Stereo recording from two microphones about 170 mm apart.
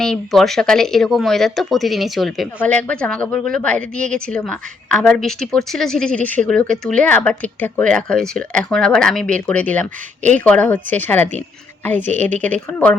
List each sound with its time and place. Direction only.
0.0 s a woman's voice: centre (ahead or behind)
12.0 s a woman's voice: 45° right (ahead or behind)
12.4 s speech: 10° left (ahead or behind)